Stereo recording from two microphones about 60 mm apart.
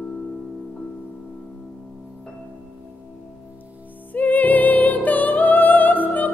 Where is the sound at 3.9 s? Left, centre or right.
Left.